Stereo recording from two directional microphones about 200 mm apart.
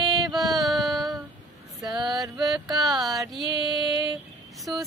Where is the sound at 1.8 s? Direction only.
Centre (ahead or behind).